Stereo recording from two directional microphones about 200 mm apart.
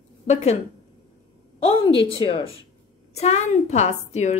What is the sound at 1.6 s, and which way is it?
A woman's voice, 25° left (ahead or behind).